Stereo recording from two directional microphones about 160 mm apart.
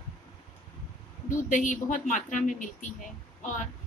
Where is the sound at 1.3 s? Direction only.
55° left (ahead or behind).